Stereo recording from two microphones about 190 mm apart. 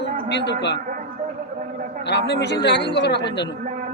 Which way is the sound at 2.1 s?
65° left (ahead or behind).